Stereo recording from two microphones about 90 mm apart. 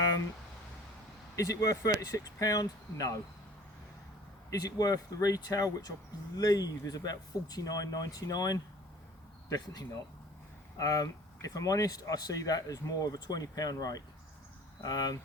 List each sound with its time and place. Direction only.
1.4 s speech: 40° left (ahead or behind)
4.5 s speech: 45° left (ahead or behind)
10.8 s speech: 40° left (ahead or behind)